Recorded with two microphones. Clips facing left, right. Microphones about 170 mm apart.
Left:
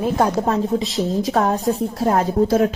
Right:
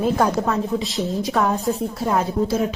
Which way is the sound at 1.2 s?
40° left (ahead or behind).